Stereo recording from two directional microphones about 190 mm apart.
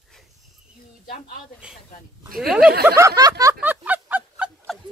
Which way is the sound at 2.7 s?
55° right (ahead or behind).